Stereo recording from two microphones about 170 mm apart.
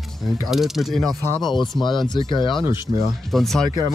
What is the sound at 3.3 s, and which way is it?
Speech, centre (ahead or behind).